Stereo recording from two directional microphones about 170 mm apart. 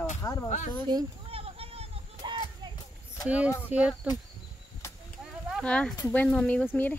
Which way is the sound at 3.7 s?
5° right (ahead or behind).